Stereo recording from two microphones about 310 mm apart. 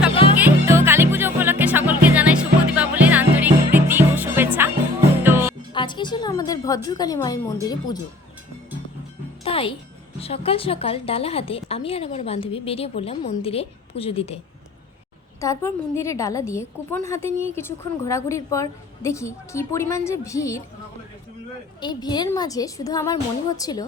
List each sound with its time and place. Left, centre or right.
0.1 s music: centre
0.3 s music: centre
5.7 s a woman's voice: centre
9.4 s music: centre
10.2 s a woman's voice: centre
15.4 s a woman's voice: centre
21.8 s a woman's voice: centre